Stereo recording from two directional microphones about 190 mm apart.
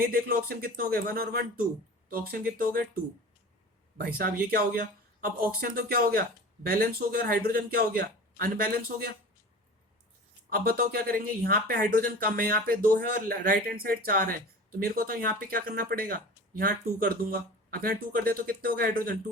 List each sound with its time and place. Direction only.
0.0 s speech: 50° right (ahead or behind)
3.9 s speech: 50° right (ahead or behind)
10.5 s speech: 55° right (ahead or behind)